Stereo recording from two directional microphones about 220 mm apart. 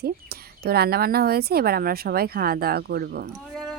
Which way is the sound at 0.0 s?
45° right (ahead or behind).